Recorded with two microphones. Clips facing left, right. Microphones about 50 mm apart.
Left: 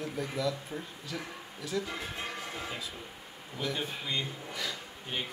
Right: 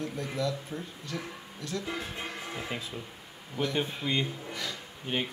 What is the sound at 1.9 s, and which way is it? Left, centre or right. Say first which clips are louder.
Music: right 2 dB; centre.